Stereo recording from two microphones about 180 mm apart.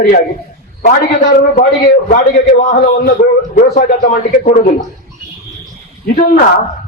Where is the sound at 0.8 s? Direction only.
50° left (ahead or behind).